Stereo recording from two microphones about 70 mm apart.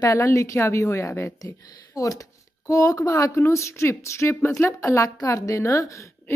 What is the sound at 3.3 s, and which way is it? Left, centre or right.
Speech, left.